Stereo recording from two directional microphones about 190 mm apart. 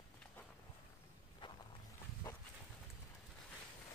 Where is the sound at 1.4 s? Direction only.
25° left (ahead or behind).